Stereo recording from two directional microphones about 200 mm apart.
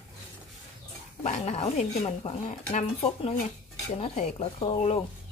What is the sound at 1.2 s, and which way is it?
Speech, 35° left (ahead or behind).